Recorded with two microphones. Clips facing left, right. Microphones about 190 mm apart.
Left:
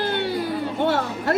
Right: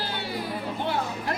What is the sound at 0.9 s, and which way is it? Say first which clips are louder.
Speech: left 6 dB; 70° left (ahead or behind).